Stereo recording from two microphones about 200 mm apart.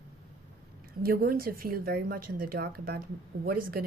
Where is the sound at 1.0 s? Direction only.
50° right (ahead or behind).